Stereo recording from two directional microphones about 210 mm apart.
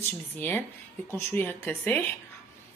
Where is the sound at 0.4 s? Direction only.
10° left (ahead or behind).